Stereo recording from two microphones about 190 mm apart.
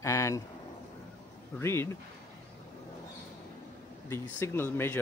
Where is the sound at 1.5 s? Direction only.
15° left (ahead or behind).